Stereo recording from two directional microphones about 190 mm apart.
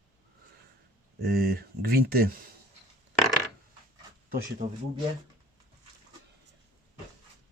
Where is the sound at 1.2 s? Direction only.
55° right (ahead or behind).